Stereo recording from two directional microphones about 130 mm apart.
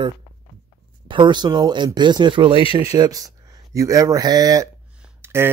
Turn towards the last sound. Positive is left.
turn(degrees=-20)  # may be behind; listen again after turning